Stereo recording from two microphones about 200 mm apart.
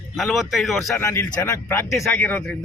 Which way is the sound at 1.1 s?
15° left (ahead or behind).